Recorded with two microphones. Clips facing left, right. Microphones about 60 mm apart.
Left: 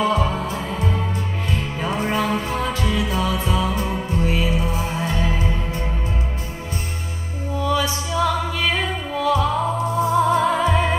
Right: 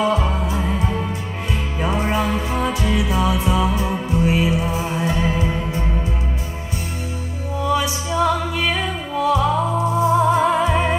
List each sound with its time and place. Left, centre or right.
0.0 s music: right
1.8 s music: right
7.5 s music: right